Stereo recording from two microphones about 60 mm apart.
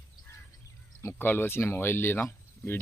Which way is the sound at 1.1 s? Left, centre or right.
Left.